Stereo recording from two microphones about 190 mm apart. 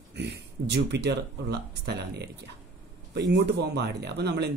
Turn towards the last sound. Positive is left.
turn(degrees=-60)  # may be behind; listen again after turning